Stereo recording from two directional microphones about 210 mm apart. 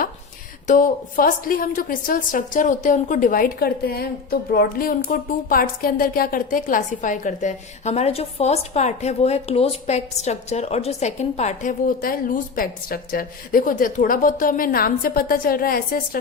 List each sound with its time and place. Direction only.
0.7 s a woman's voice: 40° left (ahead or behind)